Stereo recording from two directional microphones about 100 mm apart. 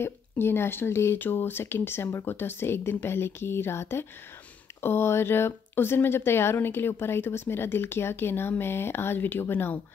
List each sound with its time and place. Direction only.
0.0 s speech: 25° left (ahead or behind)